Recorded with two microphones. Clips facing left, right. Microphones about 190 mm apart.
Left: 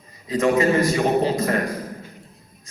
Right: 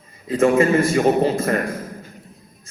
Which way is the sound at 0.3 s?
50° right (ahead or behind).